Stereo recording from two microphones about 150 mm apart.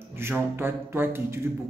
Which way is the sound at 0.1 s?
15° right (ahead or behind).